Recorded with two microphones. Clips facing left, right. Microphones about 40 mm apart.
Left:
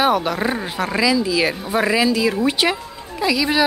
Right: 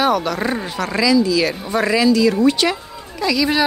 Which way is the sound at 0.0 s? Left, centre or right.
Centre.